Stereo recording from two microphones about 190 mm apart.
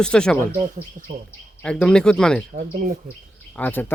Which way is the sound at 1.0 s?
45° right (ahead or behind).